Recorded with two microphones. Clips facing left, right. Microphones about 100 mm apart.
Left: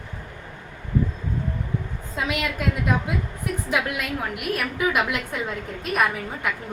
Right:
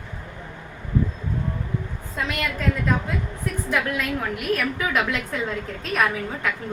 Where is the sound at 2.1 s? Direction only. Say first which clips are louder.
Left 1 dB; 10° left (ahead or behind).